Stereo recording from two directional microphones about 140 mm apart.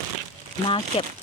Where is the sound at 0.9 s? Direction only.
45° left (ahead or behind).